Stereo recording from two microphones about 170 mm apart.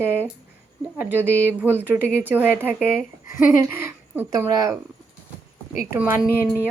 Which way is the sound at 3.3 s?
50° left (ahead or behind).